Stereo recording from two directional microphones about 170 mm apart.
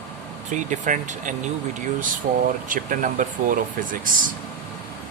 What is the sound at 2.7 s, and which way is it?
Speech, 50° right (ahead or behind).